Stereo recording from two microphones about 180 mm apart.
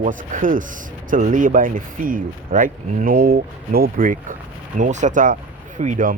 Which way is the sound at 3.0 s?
55° right (ahead or behind).